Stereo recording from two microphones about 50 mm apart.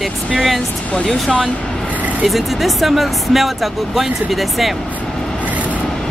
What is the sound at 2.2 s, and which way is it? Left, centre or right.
Speech, centre.